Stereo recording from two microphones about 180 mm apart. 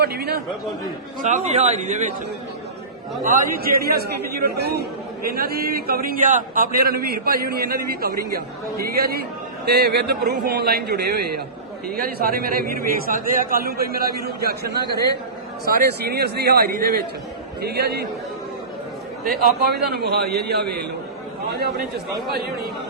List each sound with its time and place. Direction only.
0.0 s speech: 60° right (ahead or behind)
1.2 s speech: 40° right (ahead or behind)
3.2 s speech: 55° right (ahead or behind)
19.9 s speech: 65° right (ahead or behind)